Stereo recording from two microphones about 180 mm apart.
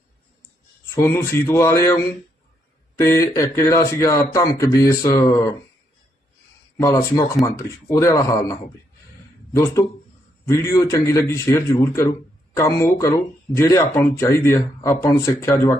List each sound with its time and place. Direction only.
0.9 s speech: 15° left (ahead or behind)
3.0 s speech: 15° left (ahead or behind)
6.7 s speech: 15° left (ahead or behind)
9.6 s speech: 15° left (ahead or behind)